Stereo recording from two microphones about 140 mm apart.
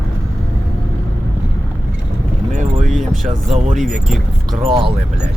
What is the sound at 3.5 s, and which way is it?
Speech, 60° right (ahead or behind).